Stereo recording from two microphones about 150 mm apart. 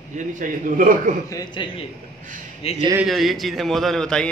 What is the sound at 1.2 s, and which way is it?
Speech, 25° left (ahead or behind).